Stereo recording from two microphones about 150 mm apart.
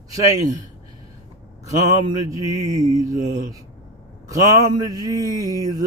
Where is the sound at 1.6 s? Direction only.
25° right (ahead or behind).